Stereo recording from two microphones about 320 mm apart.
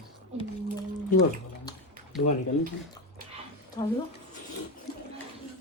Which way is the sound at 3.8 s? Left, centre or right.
Centre.